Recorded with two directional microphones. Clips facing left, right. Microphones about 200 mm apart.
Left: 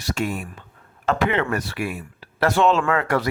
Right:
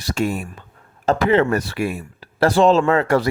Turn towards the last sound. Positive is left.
turn(degrees=-30)  # may be behind; listen again after turning